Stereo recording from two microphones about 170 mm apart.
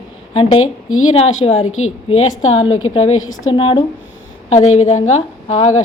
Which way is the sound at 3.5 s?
35° left (ahead or behind).